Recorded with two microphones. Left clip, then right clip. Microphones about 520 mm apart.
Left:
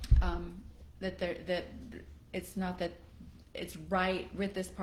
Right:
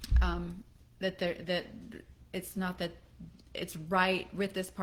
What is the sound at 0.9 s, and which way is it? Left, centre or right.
Speech, right.